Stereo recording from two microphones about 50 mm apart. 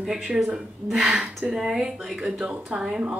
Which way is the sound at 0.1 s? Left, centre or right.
Centre.